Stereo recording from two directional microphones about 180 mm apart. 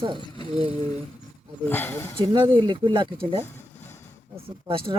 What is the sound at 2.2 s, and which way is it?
Speech, 25° right (ahead or behind).